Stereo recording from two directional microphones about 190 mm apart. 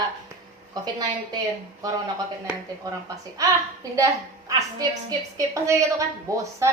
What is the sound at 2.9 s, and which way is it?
A woman's voice, 20° right (ahead or behind).